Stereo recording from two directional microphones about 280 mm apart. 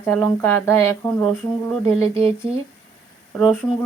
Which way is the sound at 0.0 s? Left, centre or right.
Centre.